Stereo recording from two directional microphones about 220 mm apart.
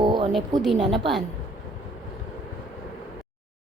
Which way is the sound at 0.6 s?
Centre (ahead or behind).